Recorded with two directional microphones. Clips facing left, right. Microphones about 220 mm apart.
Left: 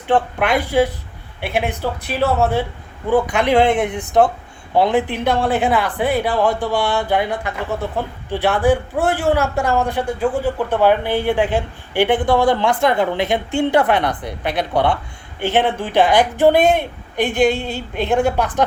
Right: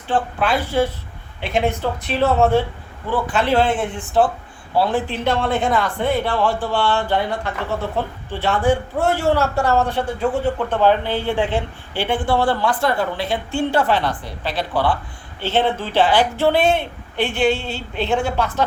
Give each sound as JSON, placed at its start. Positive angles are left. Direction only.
{"t": 0.1, "sound": "a woman's voice", "side_deg": 20}